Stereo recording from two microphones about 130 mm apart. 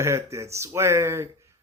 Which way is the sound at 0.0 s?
20° right (ahead or behind).